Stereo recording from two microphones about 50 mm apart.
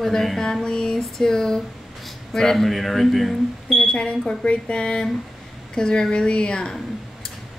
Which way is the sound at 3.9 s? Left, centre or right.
Centre.